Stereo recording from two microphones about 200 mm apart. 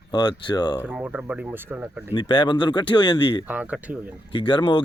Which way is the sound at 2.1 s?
25° left (ahead or behind).